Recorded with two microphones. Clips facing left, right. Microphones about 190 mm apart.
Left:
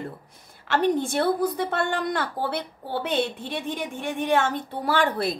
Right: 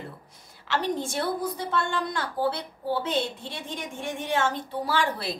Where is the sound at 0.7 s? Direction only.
55° left (ahead or behind).